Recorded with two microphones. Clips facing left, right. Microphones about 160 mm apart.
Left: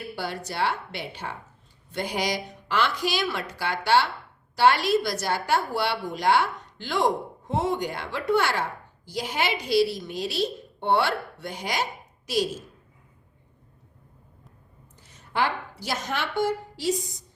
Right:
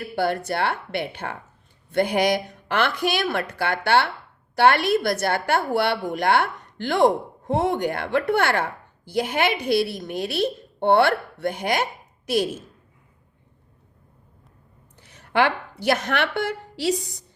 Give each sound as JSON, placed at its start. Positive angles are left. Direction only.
{"t": 0.0, "sound": "a woman's voice", "side_deg": -55}
{"t": 14.9, "sound": "a woman's voice", "side_deg": -65}